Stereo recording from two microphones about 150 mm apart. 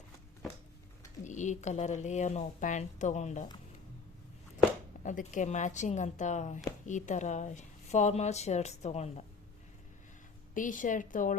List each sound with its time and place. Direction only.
1.2 s speech: 55° left (ahead or behind)
5.0 s speech: 55° left (ahead or behind)
10.5 s a woman's voice: 60° left (ahead or behind)